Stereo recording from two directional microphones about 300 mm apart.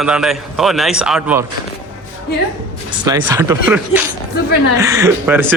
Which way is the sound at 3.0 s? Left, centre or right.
Centre.